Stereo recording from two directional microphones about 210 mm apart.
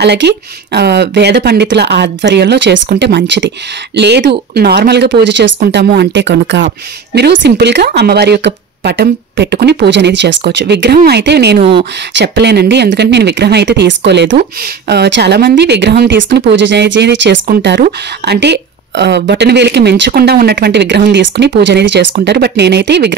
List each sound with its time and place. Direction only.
0.0 s speech: 55° right (ahead or behind)